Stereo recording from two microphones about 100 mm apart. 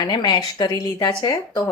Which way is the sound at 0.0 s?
45° left (ahead or behind).